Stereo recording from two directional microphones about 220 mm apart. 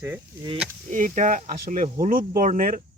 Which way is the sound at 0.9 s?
35° right (ahead or behind).